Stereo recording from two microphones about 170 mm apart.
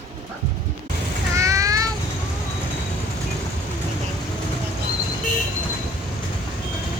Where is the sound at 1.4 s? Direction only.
20° right (ahead or behind).